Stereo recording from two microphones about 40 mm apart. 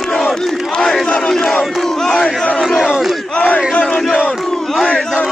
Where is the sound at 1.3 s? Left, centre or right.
Centre.